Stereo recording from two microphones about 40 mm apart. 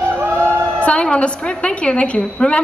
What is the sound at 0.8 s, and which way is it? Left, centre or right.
A woman's voice, left.